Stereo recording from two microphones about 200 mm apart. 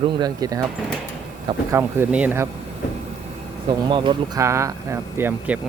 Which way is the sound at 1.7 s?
10° right (ahead or behind).